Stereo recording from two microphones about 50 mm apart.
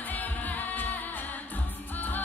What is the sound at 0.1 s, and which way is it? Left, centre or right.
Music, left.